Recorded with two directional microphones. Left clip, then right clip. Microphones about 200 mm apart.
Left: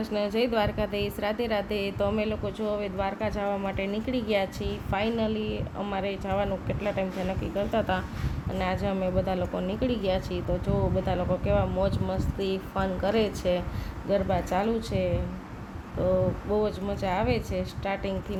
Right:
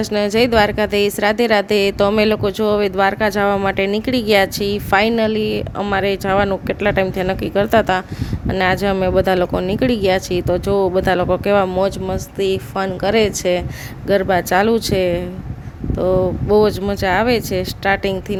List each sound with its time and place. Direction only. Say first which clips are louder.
0.0 s a woman's voice: right 11 dB; 55° right (ahead or behind)
14.1 s a woman's voice: right 11 dB; 60° right (ahead or behind)